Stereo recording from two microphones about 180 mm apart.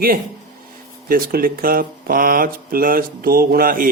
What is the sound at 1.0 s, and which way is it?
Speech, 55° right (ahead or behind).